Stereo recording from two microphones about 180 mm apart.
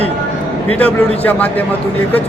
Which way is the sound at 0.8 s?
10° left (ahead or behind).